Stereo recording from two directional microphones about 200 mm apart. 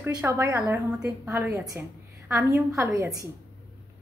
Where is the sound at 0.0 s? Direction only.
10° right (ahead or behind).